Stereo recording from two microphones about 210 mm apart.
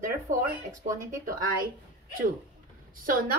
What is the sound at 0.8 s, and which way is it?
Speech, 15° right (ahead or behind).